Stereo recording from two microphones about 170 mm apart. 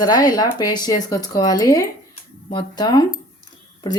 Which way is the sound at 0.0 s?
25° left (ahead or behind).